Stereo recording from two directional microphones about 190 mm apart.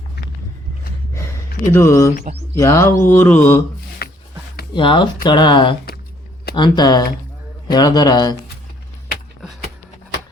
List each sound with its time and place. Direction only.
1.7 s mantra: 15° left (ahead or behind)
4.0 s a sound: 55° left (ahead or behind)
4.7 s speech: 25° left (ahead or behind)